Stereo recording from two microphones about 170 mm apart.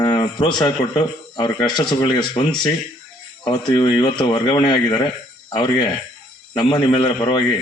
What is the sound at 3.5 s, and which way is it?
A man's voice, 25° left (ahead or behind).